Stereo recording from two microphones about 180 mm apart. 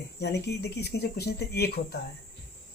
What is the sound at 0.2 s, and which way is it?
Speech, 65° left (ahead or behind).